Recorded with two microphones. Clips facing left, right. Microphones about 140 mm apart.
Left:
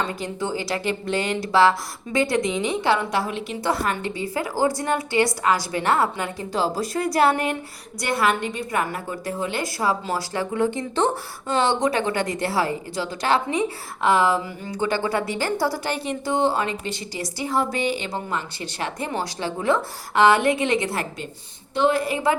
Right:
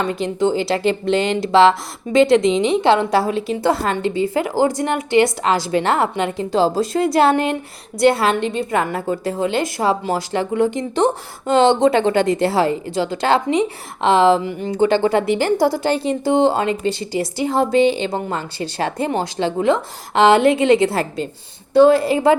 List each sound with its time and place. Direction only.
0.0 s speech: 20° right (ahead or behind)